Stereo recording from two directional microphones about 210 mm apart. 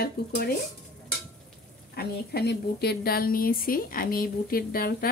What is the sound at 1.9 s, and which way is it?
A woman's voice, 50° left (ahead or behind).